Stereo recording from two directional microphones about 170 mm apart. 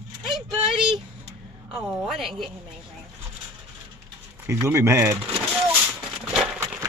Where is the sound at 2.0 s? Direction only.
Centre (ahead or behind).